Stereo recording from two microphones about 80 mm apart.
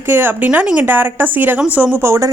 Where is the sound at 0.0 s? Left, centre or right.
Right.